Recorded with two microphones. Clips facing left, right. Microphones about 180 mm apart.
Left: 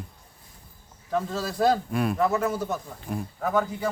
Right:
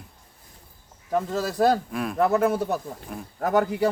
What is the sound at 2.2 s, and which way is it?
Speech, 55° right (ahead or behind).